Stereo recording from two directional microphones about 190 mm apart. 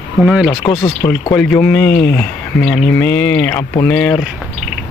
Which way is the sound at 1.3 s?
5° left (ahead or behind).